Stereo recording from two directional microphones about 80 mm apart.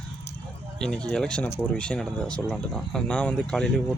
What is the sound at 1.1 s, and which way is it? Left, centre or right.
Speech, centre.